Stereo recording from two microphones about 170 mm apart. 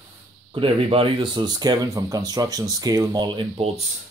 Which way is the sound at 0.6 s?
30° right (ahead or behind).